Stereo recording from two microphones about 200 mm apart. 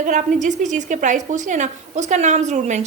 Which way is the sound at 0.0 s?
40° right (ahead or behind).